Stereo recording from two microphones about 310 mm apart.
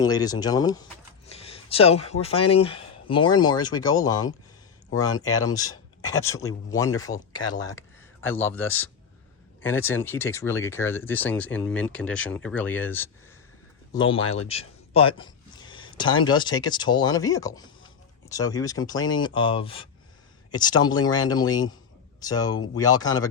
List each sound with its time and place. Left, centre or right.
0.0 s speech: centre
14.2 s speech: left
14.4 s speech: centre